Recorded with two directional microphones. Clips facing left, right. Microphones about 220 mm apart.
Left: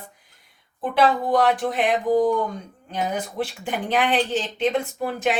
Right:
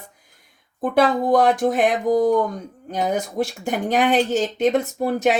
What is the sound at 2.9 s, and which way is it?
Speech, 45° right (ahead or behind).